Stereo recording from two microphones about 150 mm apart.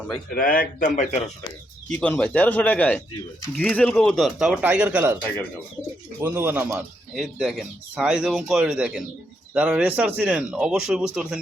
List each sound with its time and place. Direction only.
0.3 s speech: 65° left (ahead or behind)
2.0 s a man's voice: 5° left (ahead or behind); by 5.1 s 10° right (ahead or behind)
6.1 s speech: 15° right (ahead or behind)
7.2 s speech: centre (ahead or behind)